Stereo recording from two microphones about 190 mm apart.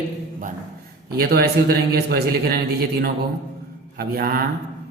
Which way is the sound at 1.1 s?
55° right (ahead or behind).